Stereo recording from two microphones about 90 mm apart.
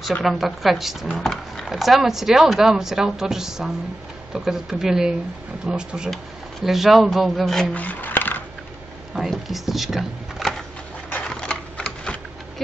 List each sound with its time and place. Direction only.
0.2 s speech: centre (ahead or behind)
7.7 s a sound: 20° left (ahead or behind)
9.1 s speech: centre (ahead or behind)
11.2 s typewriter: 10° left (ahead or behind)